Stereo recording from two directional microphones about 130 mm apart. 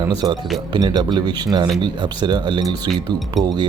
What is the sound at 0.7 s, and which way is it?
Speech, 35° right (ahead or behind).